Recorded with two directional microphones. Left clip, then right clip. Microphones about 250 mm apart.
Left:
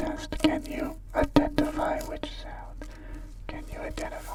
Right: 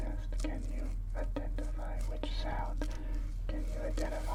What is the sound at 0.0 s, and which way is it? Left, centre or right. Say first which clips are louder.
Whispering: left 17 dB; left.